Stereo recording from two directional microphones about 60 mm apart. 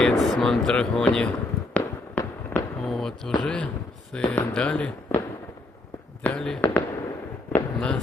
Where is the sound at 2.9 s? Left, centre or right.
Centre.